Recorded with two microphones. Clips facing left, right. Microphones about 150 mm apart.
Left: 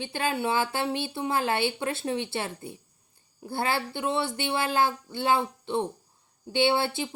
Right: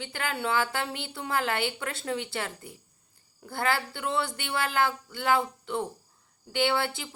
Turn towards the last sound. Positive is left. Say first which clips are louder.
# left 3 dB
turn(degrees=25)  # may be behind; listen again after turning